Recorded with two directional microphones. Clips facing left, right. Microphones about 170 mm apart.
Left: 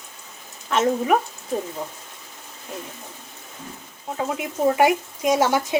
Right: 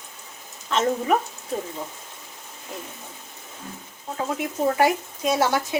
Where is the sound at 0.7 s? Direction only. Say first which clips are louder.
Left 2 dB; 10° left (ahead or behind).